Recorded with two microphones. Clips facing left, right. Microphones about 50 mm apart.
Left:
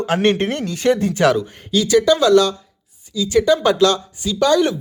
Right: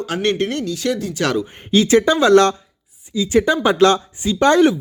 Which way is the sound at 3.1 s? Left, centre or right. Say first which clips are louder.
Left 1 dB; right.